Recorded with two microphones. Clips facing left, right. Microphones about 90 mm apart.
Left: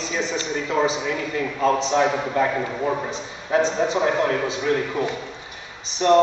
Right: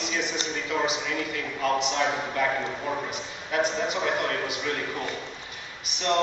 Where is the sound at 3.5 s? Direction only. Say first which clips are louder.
Left 6 dB; 30° left (ahead or behind).